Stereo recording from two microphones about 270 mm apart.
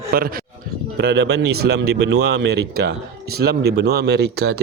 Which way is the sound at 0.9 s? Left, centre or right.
Right.